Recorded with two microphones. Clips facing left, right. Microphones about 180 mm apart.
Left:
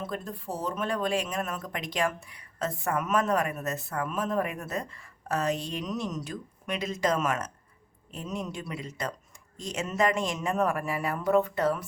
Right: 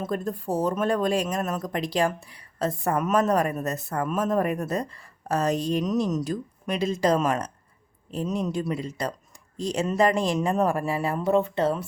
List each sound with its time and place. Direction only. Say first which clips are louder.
0.0 s speech: right 7 dB; 45° right (ahead or behind); by 11.9 s 25° right (ahead or behind)